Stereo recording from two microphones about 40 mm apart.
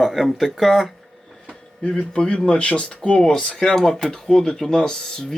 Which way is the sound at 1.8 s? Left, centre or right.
Left.